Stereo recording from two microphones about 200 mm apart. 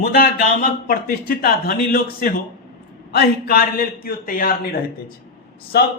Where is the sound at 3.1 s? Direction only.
50° left (ahead or behind).